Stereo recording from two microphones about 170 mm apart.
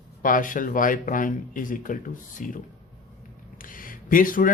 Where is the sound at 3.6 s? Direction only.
55° left (ahead or behind).